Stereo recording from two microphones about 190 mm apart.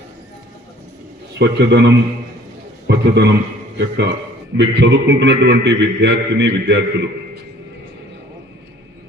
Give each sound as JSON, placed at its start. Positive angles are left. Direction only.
{"t": 1.4, "sound": "a man's voice", "side_deg": -65}